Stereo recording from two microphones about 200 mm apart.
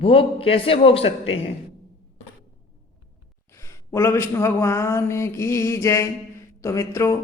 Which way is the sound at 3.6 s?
15° left (ahead or behind).